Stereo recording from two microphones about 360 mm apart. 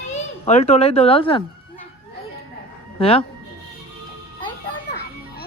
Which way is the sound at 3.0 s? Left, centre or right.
Centre.